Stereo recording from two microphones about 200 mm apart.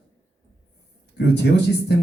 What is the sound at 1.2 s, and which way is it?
Speech, 55° left (ahead or behind).